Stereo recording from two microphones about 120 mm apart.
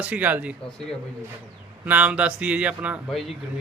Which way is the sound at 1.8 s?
10° right (ahead or behind).